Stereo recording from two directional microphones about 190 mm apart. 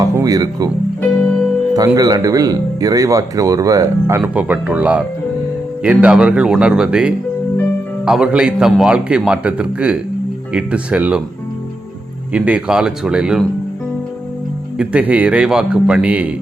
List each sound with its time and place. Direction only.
0.0 s music: 20° right (ahead or behind)
1.7 s a man's voice: 20° right (ahead or behind)
12.3 s a man's voice: 5° right (ahead or behind)
14.8 s speech: 5° right (ahead or behind)